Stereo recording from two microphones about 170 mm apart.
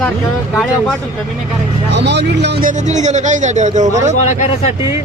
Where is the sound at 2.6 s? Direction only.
45° right (ahead or behind).